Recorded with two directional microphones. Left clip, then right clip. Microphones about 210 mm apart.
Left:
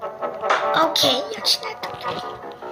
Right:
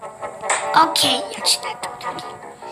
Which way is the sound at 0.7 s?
10° left (ahead or behind).